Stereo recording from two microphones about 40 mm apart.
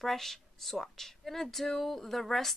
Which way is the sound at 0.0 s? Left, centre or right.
Centre.